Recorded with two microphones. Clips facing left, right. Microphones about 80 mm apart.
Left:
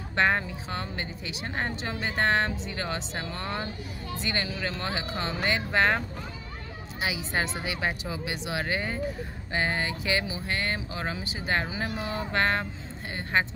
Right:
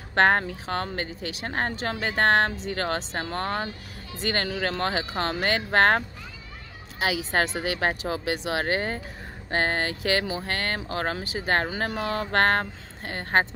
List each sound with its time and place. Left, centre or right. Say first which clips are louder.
0.1 s speech: right 5 dB; right
7.3 s speech: right 4 dB; right